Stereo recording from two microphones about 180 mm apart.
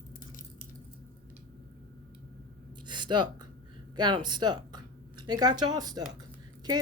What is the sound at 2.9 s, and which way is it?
Speech, 25° right (ahead or behind).